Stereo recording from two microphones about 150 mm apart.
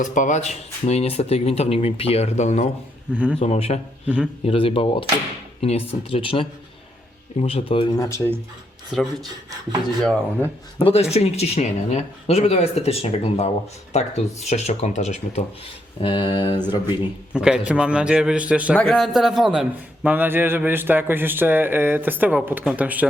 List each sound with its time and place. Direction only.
0.0 s speech: 60° left (ahead or behind); by 7.9 s 40° left (ahead or behind)
7.9 s speech: 20° left (ahead or behind)
8.9 s speech: centre (ahead or behind)
10.8 s speech: 35° left (ahead or behind)
16.0 s speech: 30° left (ahead or behind)
17.3 s a man's voice: 5° right (ahead or behind)
18.8 s a man's voice: 5° left (ahead or behind)